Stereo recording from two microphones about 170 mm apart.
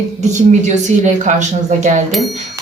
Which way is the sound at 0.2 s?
45° right (ahead or behind).